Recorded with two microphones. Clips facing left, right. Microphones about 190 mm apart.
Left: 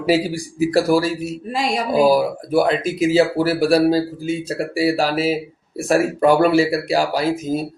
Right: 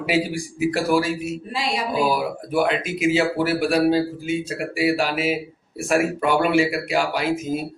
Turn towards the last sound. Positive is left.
turn(degrees=35)  # may be behind; listen again after turning